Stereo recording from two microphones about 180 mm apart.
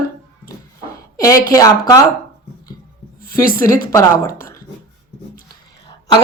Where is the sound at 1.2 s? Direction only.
15° left (ahead or behind).